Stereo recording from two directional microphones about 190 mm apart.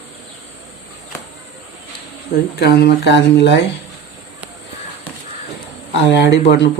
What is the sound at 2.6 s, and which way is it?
Speech, 55° left (ahead or behind).